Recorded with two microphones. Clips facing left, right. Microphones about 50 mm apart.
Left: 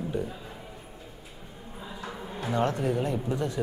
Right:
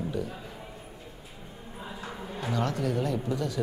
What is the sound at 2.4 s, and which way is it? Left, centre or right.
A man's voice, left.